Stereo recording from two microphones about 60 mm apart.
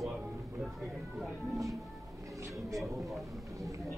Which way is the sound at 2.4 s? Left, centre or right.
Right.